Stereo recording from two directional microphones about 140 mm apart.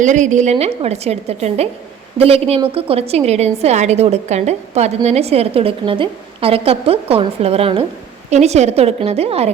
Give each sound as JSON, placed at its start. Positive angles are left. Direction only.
{"t": 0.0, "sound": "a woman's voice", "side_deg": -60}
{"t": 0.5, "sound": "a woman's voice", "side_deg": -45}